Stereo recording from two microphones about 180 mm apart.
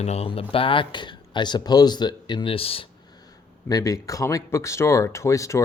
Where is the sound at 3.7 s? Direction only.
20° left (ahead or behind).